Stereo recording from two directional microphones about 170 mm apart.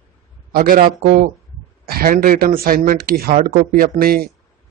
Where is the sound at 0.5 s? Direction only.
55° right (ahead or behind).